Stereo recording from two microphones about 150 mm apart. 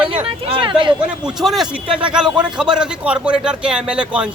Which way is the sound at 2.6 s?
5° right (ahead or behind).